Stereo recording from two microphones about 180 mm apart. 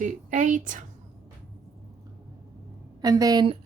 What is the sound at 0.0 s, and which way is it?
Speech, 45° right (ahead or behind).